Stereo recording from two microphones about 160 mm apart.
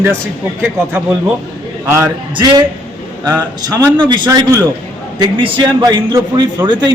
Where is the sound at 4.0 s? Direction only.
30° right (ahead or behind).